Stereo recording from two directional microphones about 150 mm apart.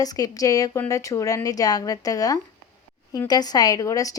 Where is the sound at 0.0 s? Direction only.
25° left (ahead or behind).